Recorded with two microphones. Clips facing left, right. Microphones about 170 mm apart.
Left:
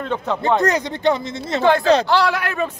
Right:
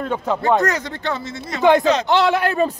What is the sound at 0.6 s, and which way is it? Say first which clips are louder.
Speech: left 2 dB; 15° left (ahead or behind).